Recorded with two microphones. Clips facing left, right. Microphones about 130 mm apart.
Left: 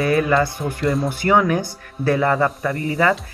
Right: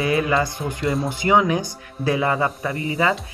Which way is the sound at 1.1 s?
15° right (ahead or behind).